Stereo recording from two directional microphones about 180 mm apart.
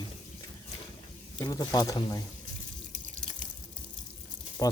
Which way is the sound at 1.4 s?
20° left (ahead or behind).